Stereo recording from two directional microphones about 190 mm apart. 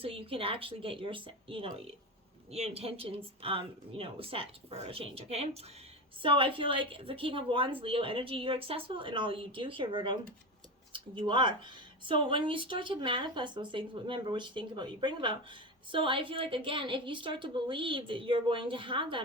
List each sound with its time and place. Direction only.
0.0 s speech: 30° right (ahead or behind)